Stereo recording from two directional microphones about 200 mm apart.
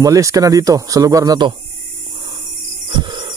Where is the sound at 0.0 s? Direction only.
15° right (ahead or behind).